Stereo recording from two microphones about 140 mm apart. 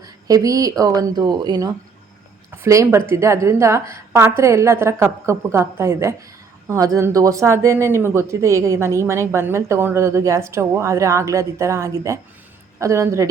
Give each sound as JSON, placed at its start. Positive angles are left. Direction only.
{"t": 0.0, "sound": "speech", "side_deg": -25}